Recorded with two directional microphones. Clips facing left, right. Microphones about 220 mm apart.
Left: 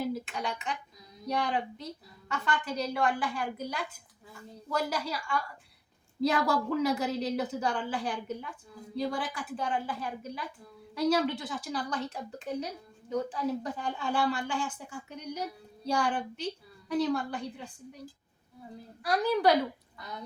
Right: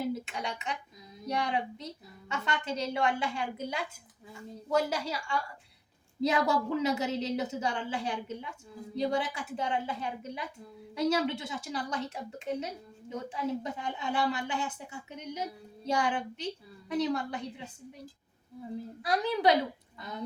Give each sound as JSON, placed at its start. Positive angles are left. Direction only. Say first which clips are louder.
{"t": 0.1, "sound": "a sound", "louder": "left 1 dB", "side_deg": -25}
{"t": 1.3, "sound": "a woman's voice", "louder": "left 1 dB", "side_deg": -25}
{"t": 19.0, "sound": "a woman's voice", "louder": "left 1 dB", "side_deg": -20}